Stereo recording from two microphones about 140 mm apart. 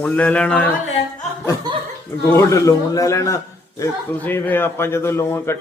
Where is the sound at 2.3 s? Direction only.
20° left (ahead or behind).